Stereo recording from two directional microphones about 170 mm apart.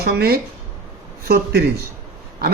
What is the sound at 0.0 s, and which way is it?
A man's voice, 65° right (ahead or behind).